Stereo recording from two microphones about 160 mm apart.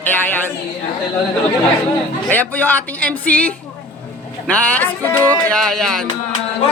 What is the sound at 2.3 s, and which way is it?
Speech, 10° left (ahead or behind).